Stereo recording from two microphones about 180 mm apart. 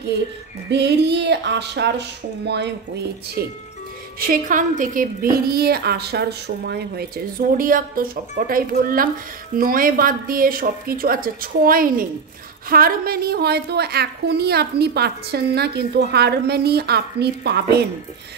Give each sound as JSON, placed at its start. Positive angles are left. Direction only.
{"t": 0.7, "sound": "a woman's voice", "side_deg": -70}
{"t": 4.2, "sound": "a woman's voice", "side_deg": -50}